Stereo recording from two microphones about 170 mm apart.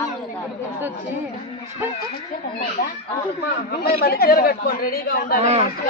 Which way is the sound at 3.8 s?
65° left (ahead or behind).